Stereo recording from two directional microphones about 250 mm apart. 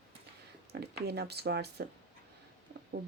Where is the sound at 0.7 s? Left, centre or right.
Right.